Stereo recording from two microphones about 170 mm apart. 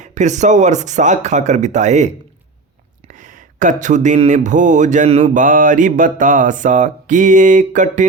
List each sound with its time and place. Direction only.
0.0 s speech: 45° right (ahead or behind)
3.1 s speech: 50° right (ahead or behind)